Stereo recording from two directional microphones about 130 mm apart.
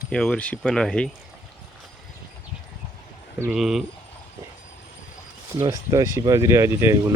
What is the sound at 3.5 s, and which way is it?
Speech, 5° right (ahead or behind).